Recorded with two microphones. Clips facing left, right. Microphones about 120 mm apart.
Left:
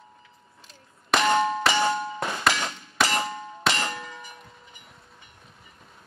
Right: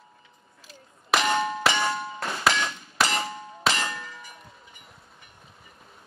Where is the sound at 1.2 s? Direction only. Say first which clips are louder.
Left 7 dB; 25° left (ahead or behind).